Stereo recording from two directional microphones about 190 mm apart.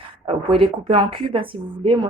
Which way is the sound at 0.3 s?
30° right (ahead or behind).